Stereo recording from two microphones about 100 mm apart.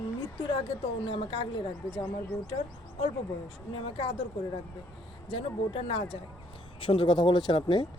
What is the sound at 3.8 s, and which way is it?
Speech, 60° left (ahead or behind).